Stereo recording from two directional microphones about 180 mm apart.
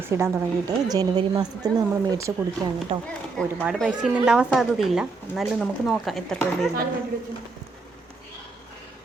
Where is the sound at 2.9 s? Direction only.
30° right (ahead or behind).